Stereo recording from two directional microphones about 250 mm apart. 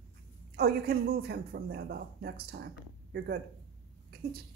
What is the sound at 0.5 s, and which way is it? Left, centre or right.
Speech, right.